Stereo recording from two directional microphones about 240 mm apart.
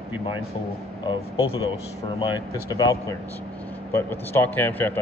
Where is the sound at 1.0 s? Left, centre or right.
Left.